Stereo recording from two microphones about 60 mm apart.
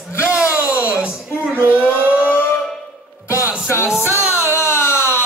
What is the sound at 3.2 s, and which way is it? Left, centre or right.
Music, left.